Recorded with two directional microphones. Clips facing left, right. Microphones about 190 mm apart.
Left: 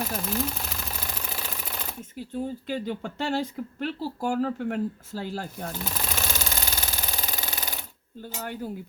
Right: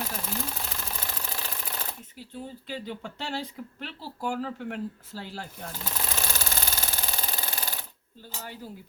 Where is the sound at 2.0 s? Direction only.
45° left (ahead or behind).